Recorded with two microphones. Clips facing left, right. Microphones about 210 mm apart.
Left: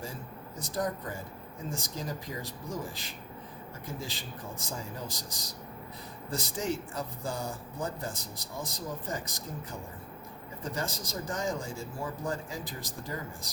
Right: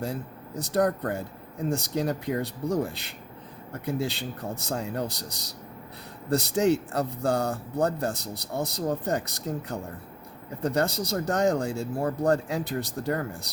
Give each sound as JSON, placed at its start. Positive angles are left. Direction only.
{"t": 0.0, "sound": "speech", "side_deg": -65}